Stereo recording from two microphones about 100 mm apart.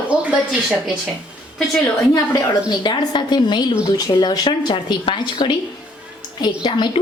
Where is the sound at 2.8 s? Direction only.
50° left (ahead or behind).